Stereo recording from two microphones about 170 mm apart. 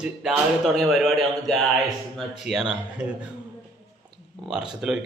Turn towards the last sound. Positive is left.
turn(degrees=-5)  # may be behind; listen again after turning